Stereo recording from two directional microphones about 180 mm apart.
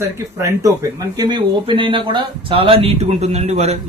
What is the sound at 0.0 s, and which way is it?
Speech, 15° right (ahead or behind).